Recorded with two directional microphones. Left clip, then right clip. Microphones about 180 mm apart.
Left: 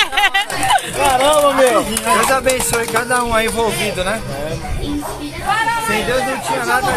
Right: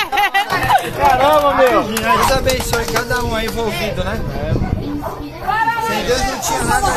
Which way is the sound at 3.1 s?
15° left (ahead or behind).